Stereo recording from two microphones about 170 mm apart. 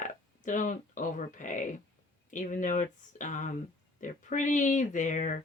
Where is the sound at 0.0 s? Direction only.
50° left (ahead or behind).